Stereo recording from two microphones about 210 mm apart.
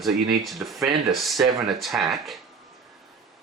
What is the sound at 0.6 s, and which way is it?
Speech, 5° right (ahead or behind).